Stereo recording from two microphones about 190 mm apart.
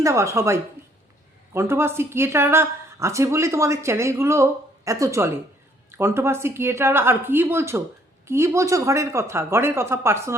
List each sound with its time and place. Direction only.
0.0 s speech: 15° right (ahead or behind)